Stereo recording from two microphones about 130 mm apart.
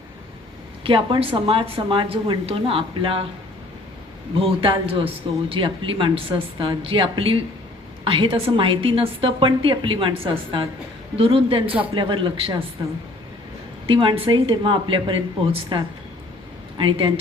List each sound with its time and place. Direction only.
0.9 s speech: 40° right (ahead or behind)
4.4 s a woman's voice: 45° right (ahead or behind)
13.8 s a woman's voice: 40° right (ahead or behind)